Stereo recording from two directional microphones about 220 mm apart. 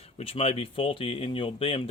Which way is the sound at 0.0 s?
25° left (ahead or behind).